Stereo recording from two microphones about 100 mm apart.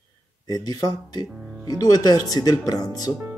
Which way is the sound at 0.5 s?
40° left (ahead or behind).